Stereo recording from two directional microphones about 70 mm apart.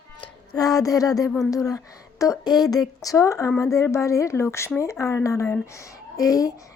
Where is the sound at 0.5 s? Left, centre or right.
Left.